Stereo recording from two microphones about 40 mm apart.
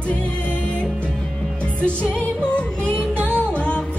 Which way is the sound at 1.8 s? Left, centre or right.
Left.